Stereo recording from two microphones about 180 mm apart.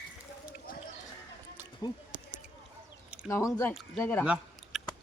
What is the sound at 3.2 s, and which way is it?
Speech, 15° left (ahead or behind).